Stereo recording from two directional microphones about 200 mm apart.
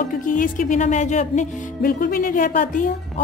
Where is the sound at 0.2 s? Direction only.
40° left (ahead or behind).